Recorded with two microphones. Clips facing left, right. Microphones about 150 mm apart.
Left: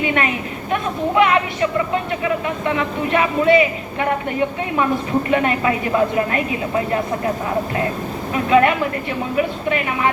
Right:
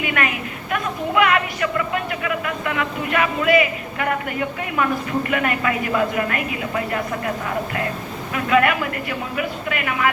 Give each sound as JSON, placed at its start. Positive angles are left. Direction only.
{"t": 0.0, "sound": "a sound", "side_deg": 25}
{"t": 0.7, "sound": "speech", "side_deg": 25}
{"t": 8.4, "sound": "speech", "side_deg": 25}